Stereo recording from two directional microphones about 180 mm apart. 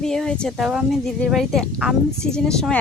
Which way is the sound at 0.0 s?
5° left (ahead or behind).